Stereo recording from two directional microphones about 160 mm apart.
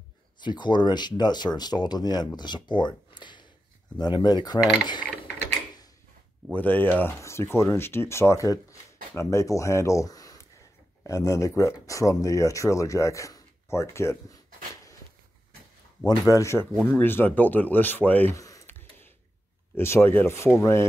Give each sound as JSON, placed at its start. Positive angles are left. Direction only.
{"t": 0.4, "sound": "speech", "side_deg": 30}
{"t": 6.5, "sound": "speech", "side_deg": 10}
{"t": 16.3, "sound": "speech", "side_deg": 20}